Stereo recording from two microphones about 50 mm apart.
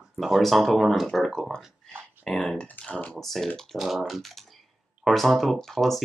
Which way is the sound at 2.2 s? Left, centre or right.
Centre.